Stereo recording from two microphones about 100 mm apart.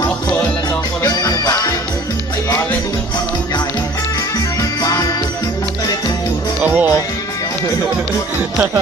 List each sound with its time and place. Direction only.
1.0 s music: 40° left (ahead or behind)
4.4 s music: 40° left (ahead or behind)
6.6 s music: 20° right (ahead or behind)